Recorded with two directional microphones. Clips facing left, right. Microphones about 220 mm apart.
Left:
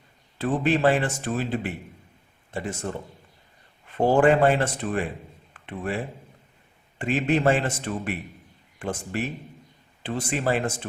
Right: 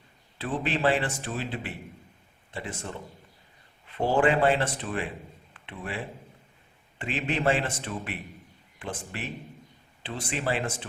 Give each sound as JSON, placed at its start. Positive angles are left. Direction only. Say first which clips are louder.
{"t": 0.3, "sound": "a man's voice", "louder": "left 7 dB", "side_deg": 45}
{"t": 3.9, "sound": "a man's voice", "louder": "left 5 dB", "side_deg": 45}
{"t": 7.0, "sound": "a man's voice", "louder": "left 6 dB", "side_deg": 45}